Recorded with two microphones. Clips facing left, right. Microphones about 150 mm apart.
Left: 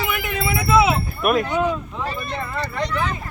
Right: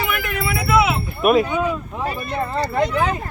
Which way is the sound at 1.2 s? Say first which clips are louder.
Right 4 dB; centre (ahead or behind).